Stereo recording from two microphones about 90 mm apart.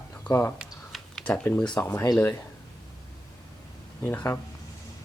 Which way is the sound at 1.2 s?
10° left (ahead or behind).